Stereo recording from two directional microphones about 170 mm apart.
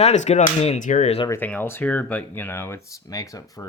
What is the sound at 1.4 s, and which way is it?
Speech, 10° left (ahead or behind).